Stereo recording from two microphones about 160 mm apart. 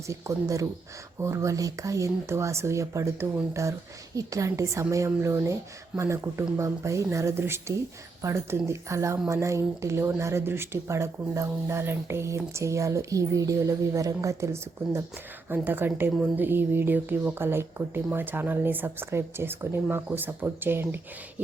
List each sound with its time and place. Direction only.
0.1 s a woman's voice: 20° right (ahead or behind)